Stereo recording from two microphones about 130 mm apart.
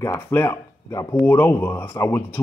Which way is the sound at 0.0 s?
20° left (ahead or behind).